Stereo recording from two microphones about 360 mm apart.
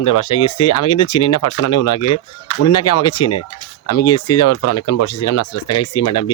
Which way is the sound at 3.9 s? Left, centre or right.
Left.